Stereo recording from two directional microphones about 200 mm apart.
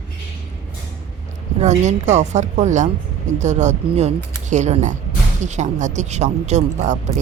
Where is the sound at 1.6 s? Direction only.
35° right (ahead or behind).